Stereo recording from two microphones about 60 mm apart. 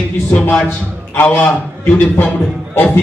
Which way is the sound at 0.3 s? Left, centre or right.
Left.